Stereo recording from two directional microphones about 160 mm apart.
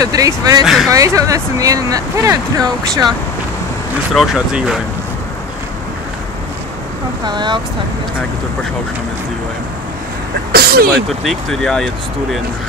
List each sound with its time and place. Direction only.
0.0 s speech: 20° right (ahead or behind)
4.1 s speech: centre (ahead or behind)
7.2 s speech: 30° right (ahead or behind)
10.5 s speech: 70° right (ahead or behind)
10.9 s speech: 5° left (ahead or behind)